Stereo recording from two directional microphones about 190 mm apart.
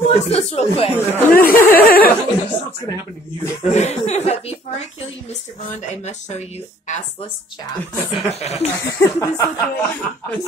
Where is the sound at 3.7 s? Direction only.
35° left (ahead or behind).